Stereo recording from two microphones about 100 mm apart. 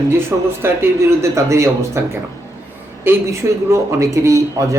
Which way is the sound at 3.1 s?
20° right (ahead or behind).